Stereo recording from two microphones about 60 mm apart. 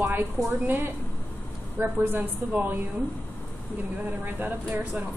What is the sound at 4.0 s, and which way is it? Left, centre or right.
Speech, right.